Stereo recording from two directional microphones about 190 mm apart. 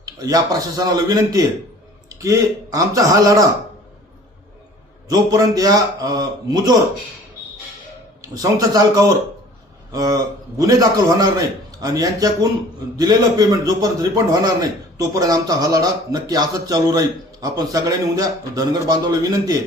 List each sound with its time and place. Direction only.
0.0 s a man's voice: 20° right (ahead or behind)
5.0 s a man's voice: 20° right (ahead or behind)
8.2 s a man's voice: 20° right (ahead or behind)